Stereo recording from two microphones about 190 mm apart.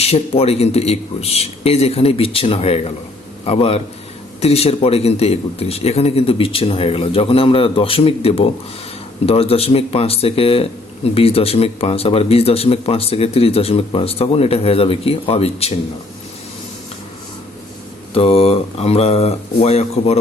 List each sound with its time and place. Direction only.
0.0 s speech: 30° left (ahead or behind)
18.1 s speech: 30° left (ahead or behind)